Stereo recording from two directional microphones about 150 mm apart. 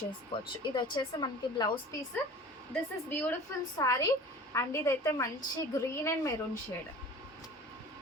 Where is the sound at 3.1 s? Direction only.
10° left (ahead or behind).